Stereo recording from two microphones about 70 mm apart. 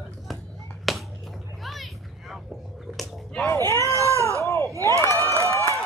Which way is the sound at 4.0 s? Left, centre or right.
Right.